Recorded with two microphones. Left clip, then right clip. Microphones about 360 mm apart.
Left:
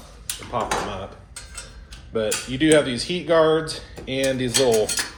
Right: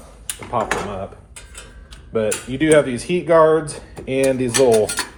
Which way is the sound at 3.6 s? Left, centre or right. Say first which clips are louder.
Right 3 dB; centre.